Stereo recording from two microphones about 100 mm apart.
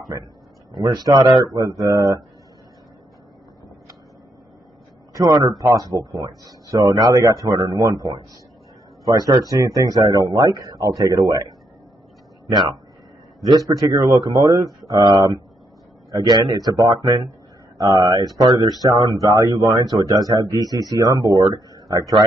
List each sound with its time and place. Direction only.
0.7 s speech: 40° right (ahead or behind)
5.1 s a man's voice: 40° right (ahead or behind)
15.0 s speech: 50° right (ahead or behind)
16.1 s speech: 40° right (ahead or behind)